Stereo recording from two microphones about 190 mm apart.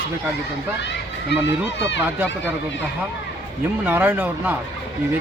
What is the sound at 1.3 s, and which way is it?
Speech, 70° left (ahead or behind).